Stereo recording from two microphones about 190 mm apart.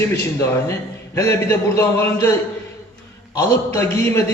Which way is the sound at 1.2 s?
15° left (ahead or behind).